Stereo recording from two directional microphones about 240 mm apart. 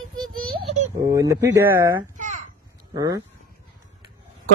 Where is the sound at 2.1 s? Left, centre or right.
Right.